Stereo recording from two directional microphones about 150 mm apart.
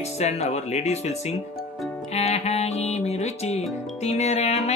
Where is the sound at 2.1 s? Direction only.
45° left (ahead or behind).